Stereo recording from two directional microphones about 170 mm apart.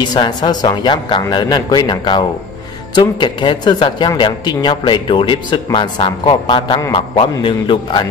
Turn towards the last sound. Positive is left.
turn(degrees=30)  # may be behind; listen again after turning